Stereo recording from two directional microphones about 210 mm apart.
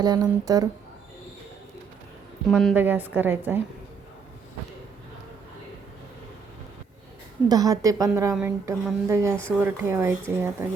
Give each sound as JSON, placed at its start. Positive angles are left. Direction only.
{"t": 0.0, "sound": "a woman's voice", "side_deg": -20}
{"t": 2.5, "sound": "a woman's voice", "side_deg": 0}
{"t": 2.7, "sound": "a woman's voice", "side_deg": -10}
{"t": 7.4, "sound": "a woman's voice", "side_deg": -20}